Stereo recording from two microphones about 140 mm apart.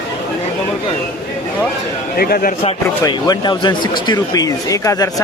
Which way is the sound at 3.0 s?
30° left (ahead or behind).